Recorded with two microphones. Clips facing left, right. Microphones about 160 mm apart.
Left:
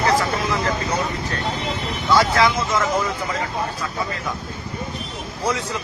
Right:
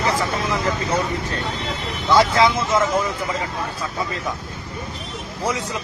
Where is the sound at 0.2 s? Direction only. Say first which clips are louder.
Even; 20° right (ahead or behind).